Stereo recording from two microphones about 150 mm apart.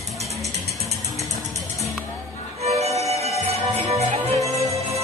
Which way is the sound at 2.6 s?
45° right (ahead or behind).